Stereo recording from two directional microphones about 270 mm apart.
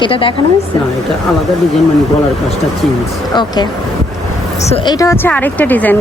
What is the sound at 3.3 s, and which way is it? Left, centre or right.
A woman's voice, centre.